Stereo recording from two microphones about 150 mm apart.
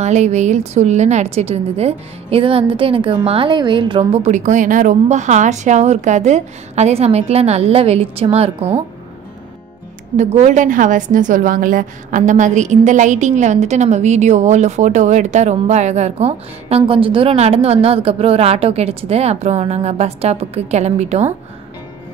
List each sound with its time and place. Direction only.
0.0 s a woman's voice: 50° right (ahead or behind)
10.1 s a woman's voice: 50° right (ahead or behind)